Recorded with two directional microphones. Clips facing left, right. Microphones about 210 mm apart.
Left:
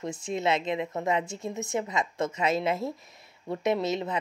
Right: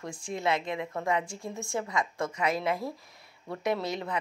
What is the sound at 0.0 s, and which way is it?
A woman's voice, 20° left (ahead or behind).